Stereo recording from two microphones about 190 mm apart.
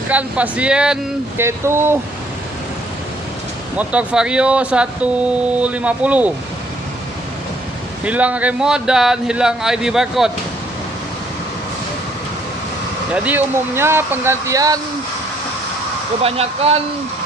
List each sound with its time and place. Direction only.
0.1 s speech: 5° right (ahead or behind)
3.7 s speech: 5° right (ahead or behind)
8.0 s speech: 5° right (ahead or behind)
13.1 s speech: 10° right (ahead or behind)
16.2 s speech: 30° right (ahead or behind)